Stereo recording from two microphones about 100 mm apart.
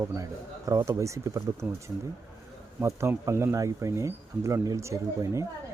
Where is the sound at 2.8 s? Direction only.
30° right (ahead or behind).